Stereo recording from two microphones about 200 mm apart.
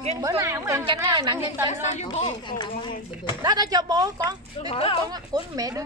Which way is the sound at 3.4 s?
20° right (ahead or behind).